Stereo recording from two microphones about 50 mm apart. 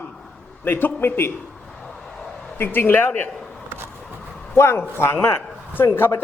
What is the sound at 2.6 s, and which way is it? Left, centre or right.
Speech, left.